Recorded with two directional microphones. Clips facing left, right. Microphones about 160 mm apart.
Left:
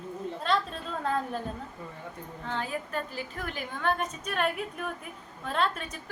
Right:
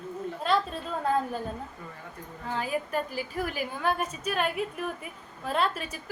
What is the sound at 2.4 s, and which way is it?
A woman's voice, 10° right (ahead or behind).